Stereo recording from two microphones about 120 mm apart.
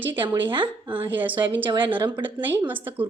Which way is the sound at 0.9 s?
15° right (ahead or behind).